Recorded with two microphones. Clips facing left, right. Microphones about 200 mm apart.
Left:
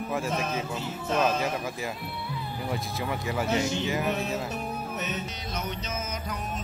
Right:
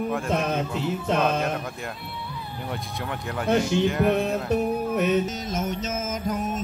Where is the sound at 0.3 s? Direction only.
65° right (ahead or behind).